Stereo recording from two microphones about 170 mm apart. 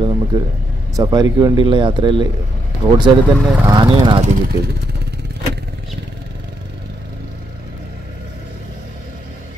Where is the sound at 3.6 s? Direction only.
25° right (ahead or behind).